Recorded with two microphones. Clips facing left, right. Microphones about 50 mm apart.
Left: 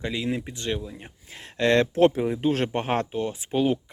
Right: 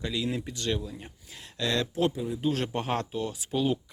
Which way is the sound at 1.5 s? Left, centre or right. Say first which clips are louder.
Left 8 dB; left.